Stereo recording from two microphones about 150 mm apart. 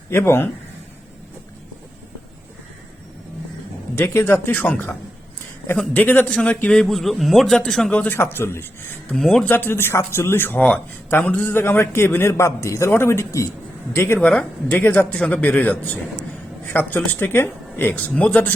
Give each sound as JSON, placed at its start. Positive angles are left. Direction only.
{"t": 0.1, "sound": "speech", "side_deg": 15}
{"t": 3.9, "sound": "speech", "side_deg": 15}
{"t": 9.0, "sound": "speech", "side_deg": 5}